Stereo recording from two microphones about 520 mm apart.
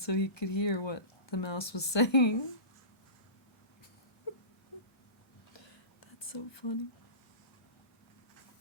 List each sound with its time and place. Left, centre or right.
0.0 s speech: left
5.5 s whispering: left